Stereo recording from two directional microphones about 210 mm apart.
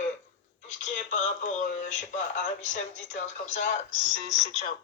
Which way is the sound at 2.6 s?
35° left (ahead or behind).